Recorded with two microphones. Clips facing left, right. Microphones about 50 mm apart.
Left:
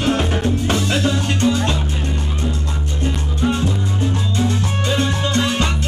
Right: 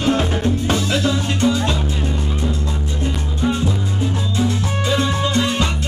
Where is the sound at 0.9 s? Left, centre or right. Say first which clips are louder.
Even; left.